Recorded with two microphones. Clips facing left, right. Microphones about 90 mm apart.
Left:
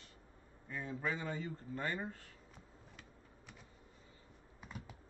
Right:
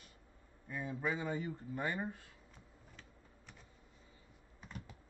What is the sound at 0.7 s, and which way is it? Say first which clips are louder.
A man's voice: right 1 dB; 10° right (ahead or behind).